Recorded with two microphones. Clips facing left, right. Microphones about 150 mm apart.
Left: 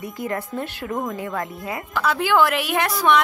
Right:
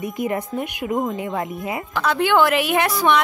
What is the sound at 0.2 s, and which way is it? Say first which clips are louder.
Speech: right 2 dB; 20° right (ahead or behind).